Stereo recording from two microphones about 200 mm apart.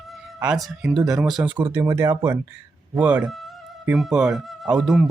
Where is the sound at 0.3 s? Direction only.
5° right (ahead or behind).